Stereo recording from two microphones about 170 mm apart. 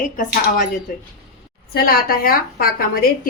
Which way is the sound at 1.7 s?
60° left (ahead or behind).